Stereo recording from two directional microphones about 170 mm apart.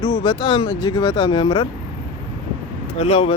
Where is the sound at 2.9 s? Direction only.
35° left (ahead or behind).